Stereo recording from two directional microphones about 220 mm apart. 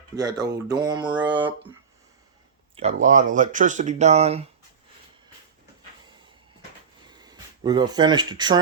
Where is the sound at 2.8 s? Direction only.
30° right (ahead or behind).